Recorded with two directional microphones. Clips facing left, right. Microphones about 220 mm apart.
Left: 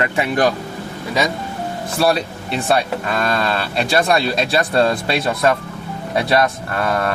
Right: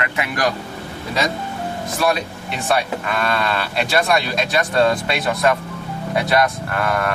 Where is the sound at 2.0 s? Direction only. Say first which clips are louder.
Left 3 dB; 30° left (ahead or behind).